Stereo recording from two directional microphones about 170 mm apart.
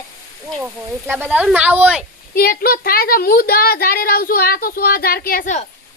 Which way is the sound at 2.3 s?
60° left (ahead or behind).